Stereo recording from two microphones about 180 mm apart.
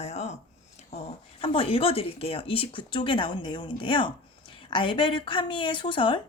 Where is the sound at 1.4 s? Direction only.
30° left (ahead or behind).